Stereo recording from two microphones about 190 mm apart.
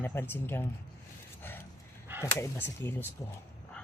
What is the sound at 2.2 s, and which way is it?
Speech, 10° left (ahead or behind).